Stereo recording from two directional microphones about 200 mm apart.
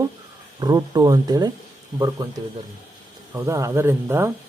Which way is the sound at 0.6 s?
20° right (ahead or behind).